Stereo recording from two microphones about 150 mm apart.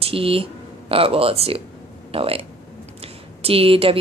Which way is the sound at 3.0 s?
40° right (ahead or behind).